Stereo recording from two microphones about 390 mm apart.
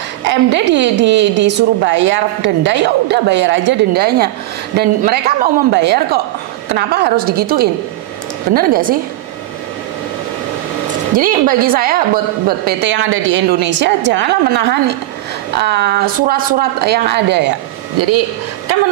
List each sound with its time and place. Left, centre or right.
0.2 s a woman's voice: right
11.1 s a woman's voice: right
17.9 s speech: right